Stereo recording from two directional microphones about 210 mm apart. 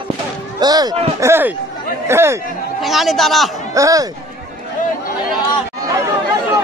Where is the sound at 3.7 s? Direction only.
15° right (ahead or behind).